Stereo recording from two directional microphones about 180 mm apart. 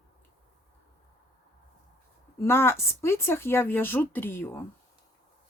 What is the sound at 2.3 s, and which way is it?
Speech, 15° left (ahead or behind).